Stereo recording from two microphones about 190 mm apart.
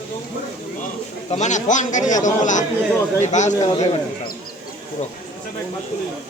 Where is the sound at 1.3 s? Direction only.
40° left (ahead or behind).